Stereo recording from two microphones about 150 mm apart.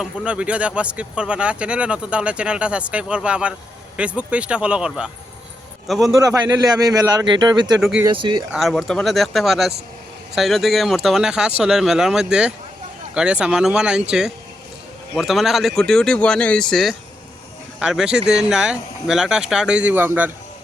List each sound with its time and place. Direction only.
0.0 s speech: 5° right (ahead or behind)
6.2 s speech: 25° right (ahead or behind)
7.8 s speech: centre (ahead or behind)
8.0 s speech: 30° right (ahead or behind)
8.5 s speech: centre (ahead or behind)